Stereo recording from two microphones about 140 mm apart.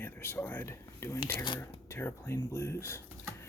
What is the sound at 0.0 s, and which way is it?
Speech, 15° left (ahead or behind).